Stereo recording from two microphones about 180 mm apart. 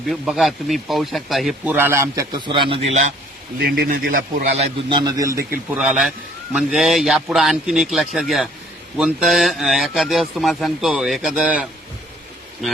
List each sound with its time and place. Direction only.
0.1 s a man's voice: centre (ahead or behind)
1.7 s a man's voice: 10° right (ahead or behind)
2.4 s a man's voice: 25° right (ahead or behind)
3.6 s a man's voice: 55° right (ahead or behind); by 4.9 s 35° right (ahead or behind)
5.0 s a man's voice: 20° right (ahead or behind)
5.7 s a man's voice: 5° right (ahead or behind)